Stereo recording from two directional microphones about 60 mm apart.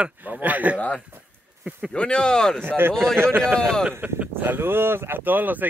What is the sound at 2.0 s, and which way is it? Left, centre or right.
Speech, centre.